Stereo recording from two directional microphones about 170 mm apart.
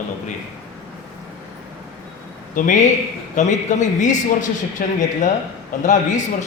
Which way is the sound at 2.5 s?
50° left (ahead or behind).